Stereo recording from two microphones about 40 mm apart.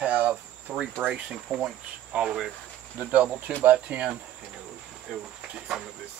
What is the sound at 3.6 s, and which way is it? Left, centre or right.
Cricket, right.